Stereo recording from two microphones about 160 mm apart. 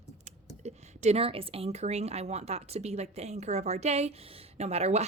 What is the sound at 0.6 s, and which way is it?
Speech, 45° right (ahead or behind).